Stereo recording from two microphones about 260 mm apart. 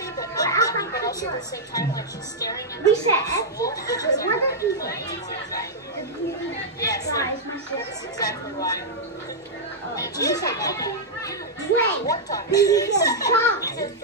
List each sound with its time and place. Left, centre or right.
0.2 s chatter: centre
1.7 s speech: centre
6.8 s speech: centre
9.9 s speech: centre